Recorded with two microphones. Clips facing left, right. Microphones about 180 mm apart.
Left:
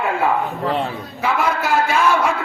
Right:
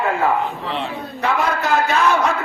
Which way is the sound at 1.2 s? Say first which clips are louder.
Even; 10° left (ahead or behind).